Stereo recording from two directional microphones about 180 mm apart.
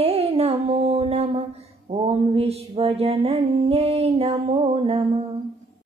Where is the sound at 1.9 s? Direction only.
35° right (ahead or behind).